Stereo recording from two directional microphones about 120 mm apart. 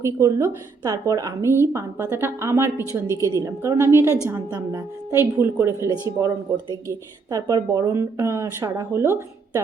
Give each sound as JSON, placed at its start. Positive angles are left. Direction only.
{"t": 0.0, "sound": "a woman's voice", "side_deg": -25}